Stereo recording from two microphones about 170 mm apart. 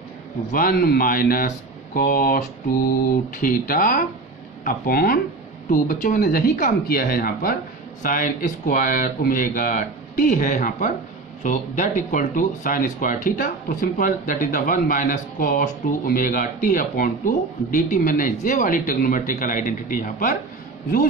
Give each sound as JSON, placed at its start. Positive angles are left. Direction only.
{"t": 0.5, "sound": "speech", "side_deg": 55}